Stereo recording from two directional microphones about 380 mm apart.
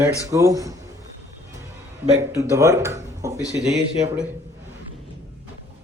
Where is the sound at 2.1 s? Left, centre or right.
Centre.